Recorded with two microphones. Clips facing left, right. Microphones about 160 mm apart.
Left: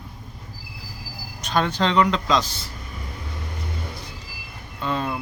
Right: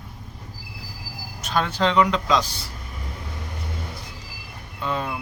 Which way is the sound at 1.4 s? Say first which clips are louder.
Left 1 dB; 5° right (ahead or behind).